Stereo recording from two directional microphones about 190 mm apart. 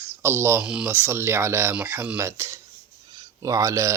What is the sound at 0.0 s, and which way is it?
Speech, 10° right (ahead or behind).